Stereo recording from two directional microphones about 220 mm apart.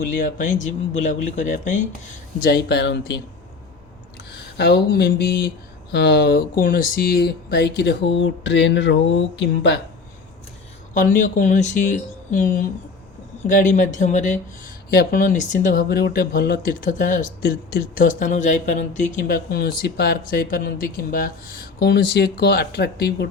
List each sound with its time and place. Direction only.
0.0 s speech: 40° left (ahead or behind)
4.5 s speech: 45° left (ahead or behind)
10.9 s speech: 35° left (ahead or behind)